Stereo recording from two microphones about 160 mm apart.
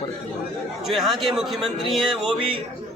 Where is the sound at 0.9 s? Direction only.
Centre (ahead or behind).